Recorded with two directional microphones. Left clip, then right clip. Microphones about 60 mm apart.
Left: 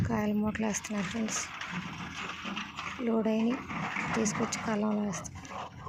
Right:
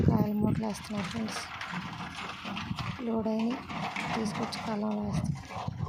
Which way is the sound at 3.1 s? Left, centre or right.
Centre.